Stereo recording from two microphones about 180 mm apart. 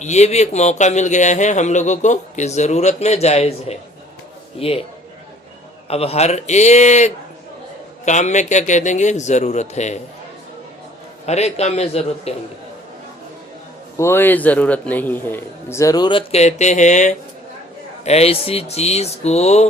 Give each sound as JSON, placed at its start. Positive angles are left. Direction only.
{"t": 0.0, "sound": "speech", "side_deg": 40}
{"t": 5.9, "sound": "speech", "side_deg": 35}
{"t": 11.3, "sound": "speech", "side_deg": 35}
{"t": 14.0, "sound": "a man's voice", "side_deg": 10}